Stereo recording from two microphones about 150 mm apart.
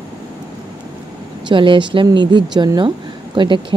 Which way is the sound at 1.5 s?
35° right (ahead or behind).